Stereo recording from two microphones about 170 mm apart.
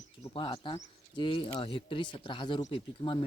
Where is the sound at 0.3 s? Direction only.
30° left (ahead or behind).